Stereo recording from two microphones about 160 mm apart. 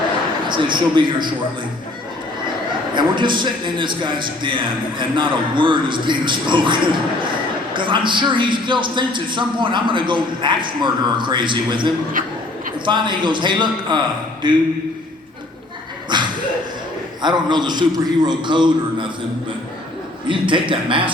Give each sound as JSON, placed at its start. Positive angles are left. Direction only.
{"t": 0.4, "sound": "a man's voice", "side_deg": -30}
{"t": 2.9, "sound": "a man's voice", "side_deg": -30}
{"t": 12.2, "sound": "speech", "side_deg": -60}
{"t": 12.8, "sound": "a man's voice", "side_deg": -30}
{"t": 16.1, "sound": "a sound", "side_deg": -30}
{"t": 17.2, "sound": "a man's voice", "side_deg": -30}
{"t": 20.2, "sound": "a man's voice", "side_deg": -30}